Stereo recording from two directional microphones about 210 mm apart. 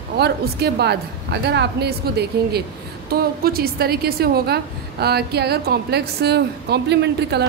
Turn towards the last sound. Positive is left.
turn(degrees=-55)  # may be behind; listen again after turning